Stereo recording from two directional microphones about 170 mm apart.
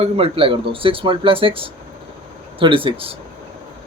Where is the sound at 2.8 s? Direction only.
35° right (ahead or behind).